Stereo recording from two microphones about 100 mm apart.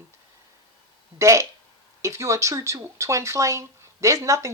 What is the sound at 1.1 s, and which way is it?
Speech, 30° right (ahead or behind).